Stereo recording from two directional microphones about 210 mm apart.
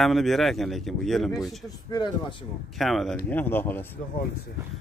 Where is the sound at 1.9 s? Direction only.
20° left (ahead or behind).